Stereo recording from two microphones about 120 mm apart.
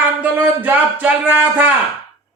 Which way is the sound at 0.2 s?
15° right (ahead or behind).